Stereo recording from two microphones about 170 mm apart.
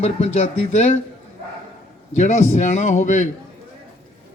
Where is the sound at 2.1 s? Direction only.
45° left (ahead or behind).